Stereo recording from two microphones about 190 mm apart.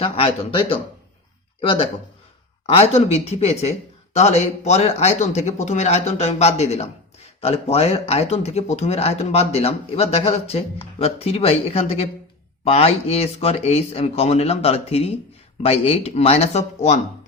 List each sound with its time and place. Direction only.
0.0 s speech: 30° left (ahead or behind)
2.6 s speech: 35° left (ahead or behind)